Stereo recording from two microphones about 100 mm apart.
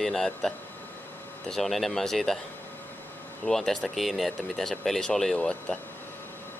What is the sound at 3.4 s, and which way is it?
Speech, 5° left (ahead or behind).